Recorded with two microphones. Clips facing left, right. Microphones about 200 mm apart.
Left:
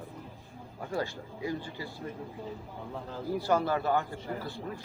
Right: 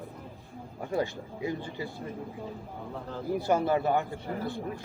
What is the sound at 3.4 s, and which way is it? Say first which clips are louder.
Speech: right 2 dB; 20° right (ahead or behind).